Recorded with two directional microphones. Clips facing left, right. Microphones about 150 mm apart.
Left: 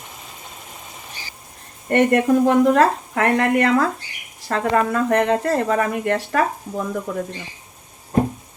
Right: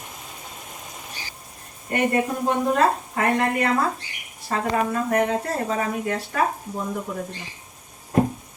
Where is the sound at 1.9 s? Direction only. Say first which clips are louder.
Left 7 dB; 70° left (ahead or behind).